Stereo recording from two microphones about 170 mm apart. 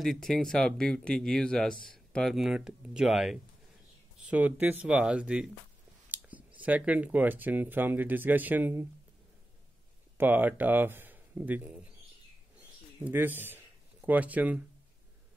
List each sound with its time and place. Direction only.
0.0 s speech: centre (ahead or behind)
6.0 s a sound: 10° right (ahead or behind)
6.6 s speech: 10° right (ahead or behind)
10.1 s speech: 10° right (ahead or behind)
13.0 s speech: 10° right (ahead or behind)